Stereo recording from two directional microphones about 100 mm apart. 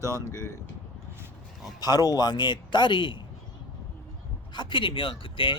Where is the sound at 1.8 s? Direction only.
40° left (ahead or behind).